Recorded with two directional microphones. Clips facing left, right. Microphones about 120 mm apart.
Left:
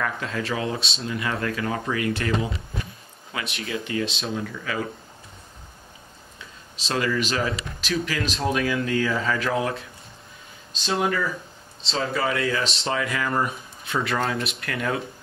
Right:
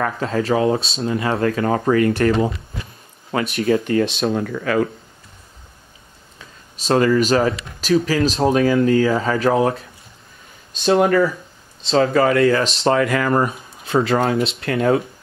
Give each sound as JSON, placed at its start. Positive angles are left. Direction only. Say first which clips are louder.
{"t": 0.0, "sound": "speech", "louder": "right 7 dB", "side_deg": -35}
{"t": 6.3, "sound": "speech", "louder": "right 3 dB", "side_deg": -45}
{"t": 10.8, "sound": "speech", "louder": "right 10 dB", "side_deg": -50}
{"t": 13.8, "sound": "speech", "louder": "right 8 dB", "side_deg": -35}